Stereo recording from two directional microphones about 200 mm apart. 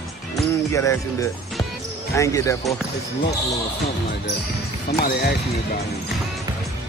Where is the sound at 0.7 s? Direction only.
15° left (ahead or behind).